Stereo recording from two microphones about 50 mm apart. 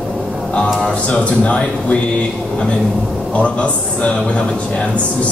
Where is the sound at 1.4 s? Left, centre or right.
Left.